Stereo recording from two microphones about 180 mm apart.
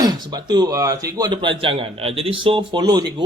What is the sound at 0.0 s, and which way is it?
Speech, 20° right (ahead or behind).